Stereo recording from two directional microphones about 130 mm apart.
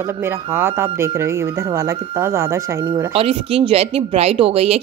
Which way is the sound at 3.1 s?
45° right (ahead or behind).